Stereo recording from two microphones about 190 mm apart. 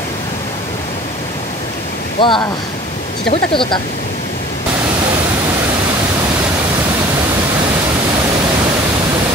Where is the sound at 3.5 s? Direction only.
25° left (ahead or behind).